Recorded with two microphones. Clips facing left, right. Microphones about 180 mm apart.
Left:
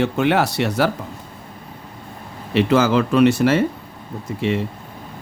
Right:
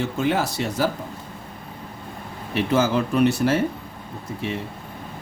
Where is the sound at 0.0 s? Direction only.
70° left (ahead or behind).